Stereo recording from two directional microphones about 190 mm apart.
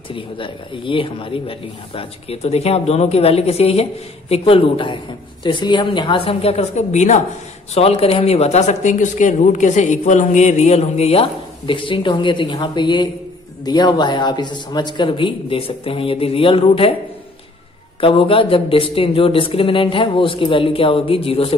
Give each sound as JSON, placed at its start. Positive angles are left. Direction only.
{"t": 0.1, "sound": "speech", "side_deg": 25}
{"t": 18.0, "sound": "speech", "side_deg": 30}